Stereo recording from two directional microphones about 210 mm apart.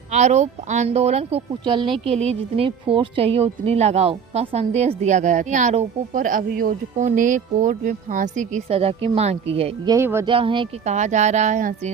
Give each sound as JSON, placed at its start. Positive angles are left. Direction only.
{"t": 0.1, "sound": "speech", "side_deg": -35}
{"t": 9.9, "sound": "speech", "side_deg": -10}
{"t": 10.2, "sound": "speech", "side_deg": -25}